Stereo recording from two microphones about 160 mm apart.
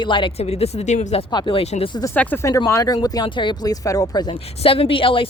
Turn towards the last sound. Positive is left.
turn(degrees=35)  # may be behind; listen again after turning